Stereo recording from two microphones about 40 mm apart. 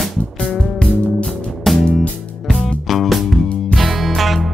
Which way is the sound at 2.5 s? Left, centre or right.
Centre.